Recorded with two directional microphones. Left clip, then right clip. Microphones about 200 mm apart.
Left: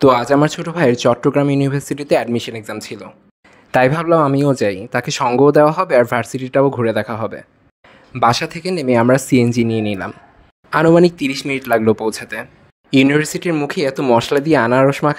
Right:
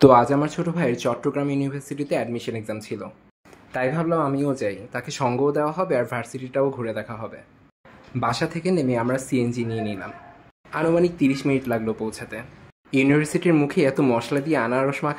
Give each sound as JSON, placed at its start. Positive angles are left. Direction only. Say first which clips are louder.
{"t": 0.1, "sound": "speech", "louder": "left 3 dB", "side_deg": 50}